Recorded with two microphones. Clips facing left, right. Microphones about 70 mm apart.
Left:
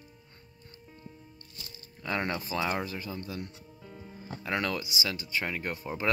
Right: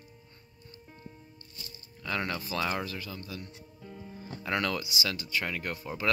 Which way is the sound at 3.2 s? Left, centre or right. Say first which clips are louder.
Left 3 dB; left.